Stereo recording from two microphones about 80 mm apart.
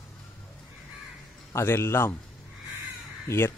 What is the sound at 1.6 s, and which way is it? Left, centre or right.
Speech, left.